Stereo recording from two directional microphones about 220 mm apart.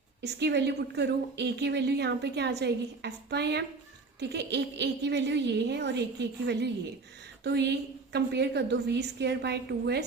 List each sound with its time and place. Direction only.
0.2 s speech: 50° right (ahead or behind)